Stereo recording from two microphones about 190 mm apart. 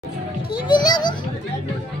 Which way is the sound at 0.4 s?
25° left (ahead or behind).